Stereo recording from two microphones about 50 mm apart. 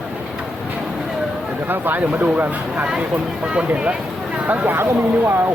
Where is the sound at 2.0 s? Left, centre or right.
Right.